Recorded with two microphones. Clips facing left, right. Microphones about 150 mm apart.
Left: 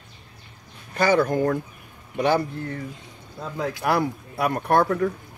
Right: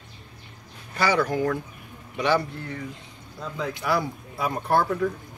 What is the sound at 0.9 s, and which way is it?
Speech, 50° left (ahead or behind).